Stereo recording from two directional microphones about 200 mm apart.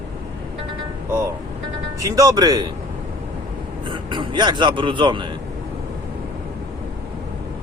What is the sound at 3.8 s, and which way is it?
Speech, 25° right (ahead or behind).